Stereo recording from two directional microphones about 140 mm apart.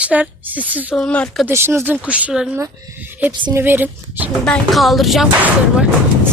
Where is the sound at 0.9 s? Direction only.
5° left (ahead or behind).